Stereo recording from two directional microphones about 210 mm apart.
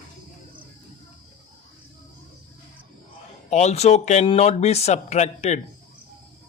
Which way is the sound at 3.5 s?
30° left (ahead or behind).